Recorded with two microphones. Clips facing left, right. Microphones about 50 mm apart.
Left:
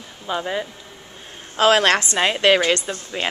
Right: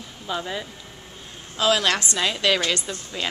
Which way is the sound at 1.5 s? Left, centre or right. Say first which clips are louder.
Left 5 dB; left.